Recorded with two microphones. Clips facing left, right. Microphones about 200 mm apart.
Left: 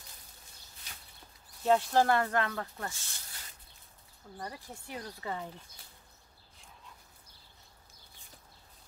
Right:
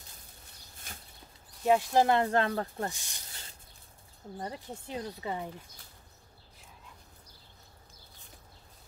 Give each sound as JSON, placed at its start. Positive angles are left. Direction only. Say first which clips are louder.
{"t": 0.9, "sound": "a sound", "louder": "right 5 dB", "side_deg": -50}
{"t": 1.6, "sound": "speech", "louder": "right 1 dB", "side_deg": -10}
{"t": 2.9, "sound": "speech", "louder": "right 4 dB", "side_deg": -15}
{"t": 4.4, "sound": "speech", "louder": "right 4 dB", "side_deg": -25}